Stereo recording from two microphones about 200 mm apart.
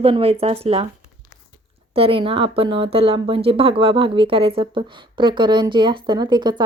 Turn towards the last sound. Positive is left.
turn(degrees=-20)  # may be behind; listen again after turning